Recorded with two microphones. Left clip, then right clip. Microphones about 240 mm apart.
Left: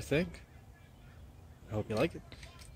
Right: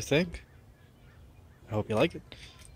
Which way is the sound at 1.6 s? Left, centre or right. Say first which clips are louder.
Right 6 dB; right.